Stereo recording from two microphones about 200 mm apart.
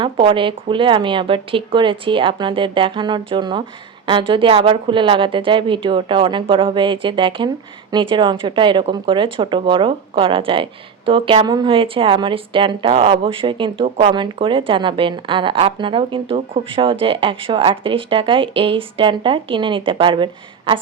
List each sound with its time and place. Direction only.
0.0 s a woman's voice: 25° right (ahead or behind)